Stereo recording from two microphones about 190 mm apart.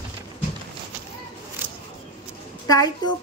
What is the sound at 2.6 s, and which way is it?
Speech, 20° left (ahead or behind).